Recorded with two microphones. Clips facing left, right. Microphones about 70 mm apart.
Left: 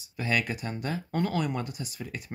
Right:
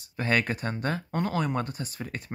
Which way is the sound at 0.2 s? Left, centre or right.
Right.